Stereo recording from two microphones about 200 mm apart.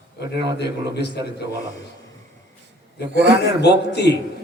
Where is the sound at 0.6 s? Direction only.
55° left (ahead or behind).